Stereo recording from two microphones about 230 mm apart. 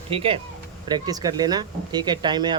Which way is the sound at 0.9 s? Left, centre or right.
Centre.